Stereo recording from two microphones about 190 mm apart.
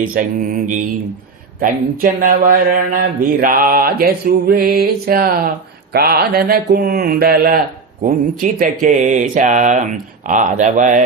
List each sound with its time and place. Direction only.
0.1 s mantra: 45° right (ahead or behind)
8.0 s speech: 45° right (ahead or behind)